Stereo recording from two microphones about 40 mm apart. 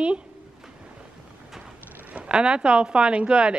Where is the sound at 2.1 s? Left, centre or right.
Right.